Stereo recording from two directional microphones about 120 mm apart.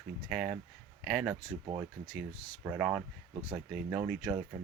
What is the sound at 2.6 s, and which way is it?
Speech, 15° right (ahead or behind).